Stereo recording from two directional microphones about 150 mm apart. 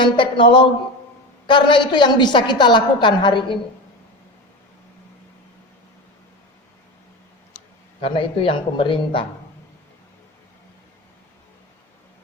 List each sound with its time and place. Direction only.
0.0 s a woman's voice: 35° left (ahead or behind)
8.0 s a woman's voice: 35° left (ahead or behind)